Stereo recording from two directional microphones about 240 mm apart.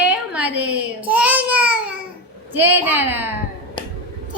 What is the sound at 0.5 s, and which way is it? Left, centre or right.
Speech, right.